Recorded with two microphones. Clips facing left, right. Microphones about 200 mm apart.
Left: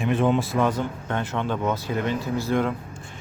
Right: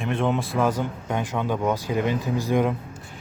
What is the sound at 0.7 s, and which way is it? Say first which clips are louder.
Speech: right 1 dB; 10° right (ahead or behind).